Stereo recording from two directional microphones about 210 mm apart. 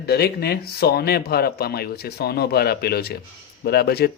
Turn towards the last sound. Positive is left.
turn(degrees=50)  # may be behind; listen again after turning